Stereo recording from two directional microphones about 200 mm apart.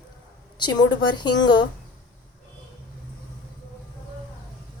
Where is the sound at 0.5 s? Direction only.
20° left (ahead or behind).